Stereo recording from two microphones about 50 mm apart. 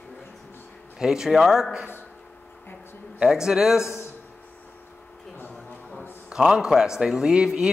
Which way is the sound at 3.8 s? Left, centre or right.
Left.